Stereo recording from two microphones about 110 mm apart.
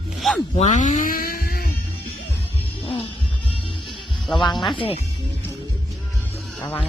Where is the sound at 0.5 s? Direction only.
90° left.